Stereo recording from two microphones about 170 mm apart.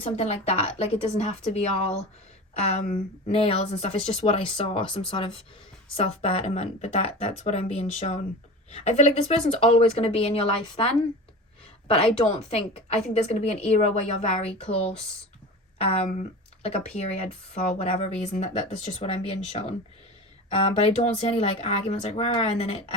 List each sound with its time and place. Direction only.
0.0 s speech: 40° left (ahead or behind)
2.6 s speech: 40° left (ahead or behind)
11.9 s speech: 35° left (ahead or behind)